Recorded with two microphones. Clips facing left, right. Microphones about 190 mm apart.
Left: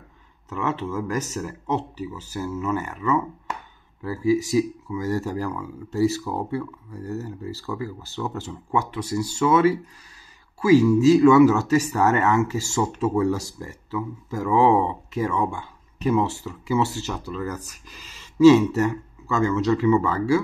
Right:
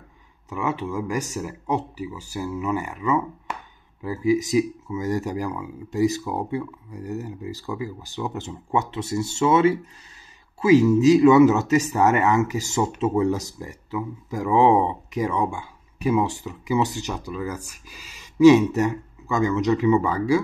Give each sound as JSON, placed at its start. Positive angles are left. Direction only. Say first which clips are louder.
{"t": 0.5, "sound": "speech", "louder": "even", "side_deg": -10}